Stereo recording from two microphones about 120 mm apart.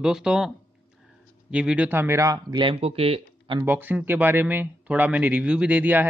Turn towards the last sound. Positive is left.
turn(degrees=-15)  # may be behind; listen again after turning